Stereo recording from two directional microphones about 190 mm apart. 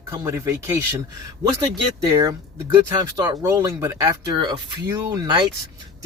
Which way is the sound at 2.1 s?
15° right (ahead or behind).